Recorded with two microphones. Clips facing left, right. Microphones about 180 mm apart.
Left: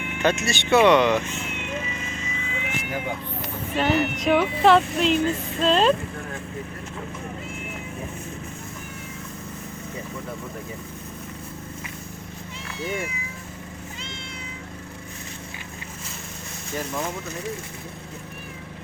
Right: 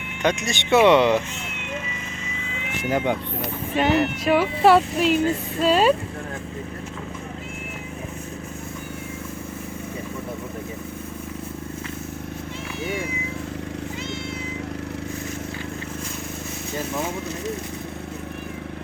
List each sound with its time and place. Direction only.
0.2 s speech: 15° right (ahead or behind)
3.8 s speech: 5° right (ahead or behind)